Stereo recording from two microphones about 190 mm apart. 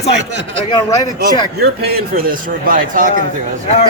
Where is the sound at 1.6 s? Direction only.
55° right (ahead or behind).